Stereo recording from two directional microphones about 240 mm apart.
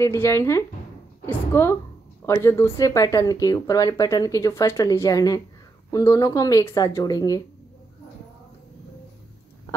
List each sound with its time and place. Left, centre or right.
0.0 s speech: centre